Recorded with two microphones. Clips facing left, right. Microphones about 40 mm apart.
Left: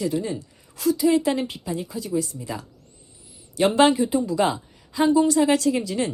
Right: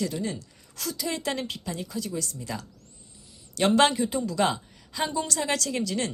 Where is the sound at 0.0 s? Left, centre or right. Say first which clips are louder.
Left 5 dB; left.